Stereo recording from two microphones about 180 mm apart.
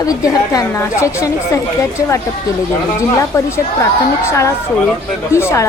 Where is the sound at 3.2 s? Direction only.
15° left (ahead or behind).